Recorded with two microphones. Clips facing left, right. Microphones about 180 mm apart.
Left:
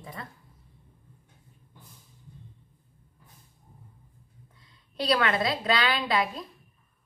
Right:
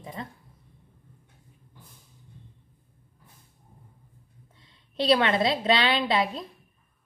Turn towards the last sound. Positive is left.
turn(degrees=-25)  # may be behind; listen again after turning